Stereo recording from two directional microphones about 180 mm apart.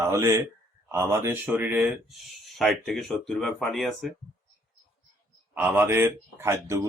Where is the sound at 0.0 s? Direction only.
15° right (ahead or behind); by 4.1 s centre (ahead or behind).